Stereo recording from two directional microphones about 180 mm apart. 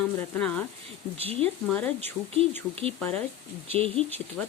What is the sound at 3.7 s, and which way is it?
Speech, 35° right (ahead or behind).